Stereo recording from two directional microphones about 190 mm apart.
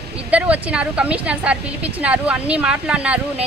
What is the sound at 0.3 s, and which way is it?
A woman's voice, 5° right (ahead or behind).